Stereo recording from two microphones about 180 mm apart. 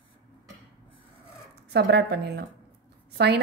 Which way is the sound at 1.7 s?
65° right (ahead or behind).